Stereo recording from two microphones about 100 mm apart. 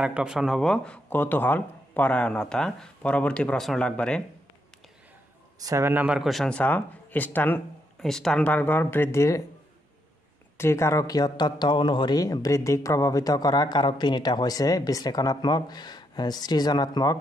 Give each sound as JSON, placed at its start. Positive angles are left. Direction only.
{"t": 0.0, "sound": "speech", "side_deg": -10}
{"t": 5.6, "sound": "a man's voice", "side_deg": -35}
{"t": 5.9, "sound": "speech", "side_deg": -20}
{"t": 6.1, "sound": "speech", "side_deg": 0}
{"t": 6.5, "sound": "speech", "side_deg": 15}
{"t": 8.0, "sound": "speech", "side_deg": 5}
{"t": 10.6, "sound": "speech", "side_deg": 30}